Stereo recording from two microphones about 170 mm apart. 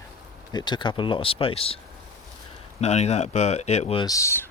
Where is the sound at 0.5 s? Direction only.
25° left (ahead or behind).